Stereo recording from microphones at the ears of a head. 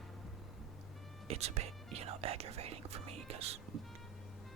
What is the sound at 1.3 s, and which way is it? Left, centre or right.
Speech, right.